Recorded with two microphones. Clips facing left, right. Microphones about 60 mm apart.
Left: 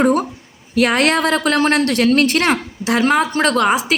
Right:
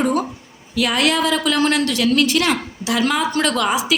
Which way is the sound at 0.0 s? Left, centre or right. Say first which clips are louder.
Left 4 dB; left.